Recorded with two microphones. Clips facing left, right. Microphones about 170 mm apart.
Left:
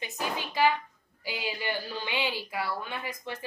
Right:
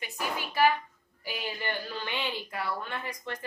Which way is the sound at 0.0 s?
20° left (ahead or behind).